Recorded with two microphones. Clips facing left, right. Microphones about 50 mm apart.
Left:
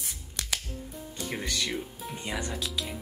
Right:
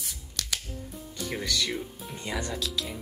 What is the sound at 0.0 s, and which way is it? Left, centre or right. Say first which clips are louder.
Scissors: right 1 dB; left.